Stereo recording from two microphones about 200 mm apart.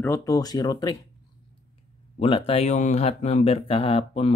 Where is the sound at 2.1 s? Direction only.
25° left (ahead or behind).